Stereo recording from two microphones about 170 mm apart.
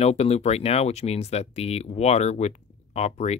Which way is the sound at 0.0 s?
40° left (ahead or behind).